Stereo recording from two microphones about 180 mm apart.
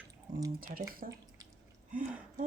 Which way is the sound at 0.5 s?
55° right (ahead or behind).